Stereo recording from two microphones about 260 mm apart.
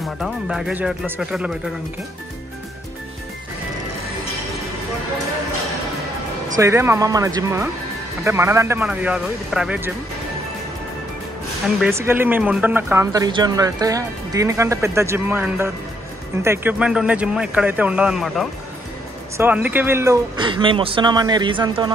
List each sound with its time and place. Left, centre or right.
0.2 s speech: centre
6.5 s speech: centre
11.8 s speech: centre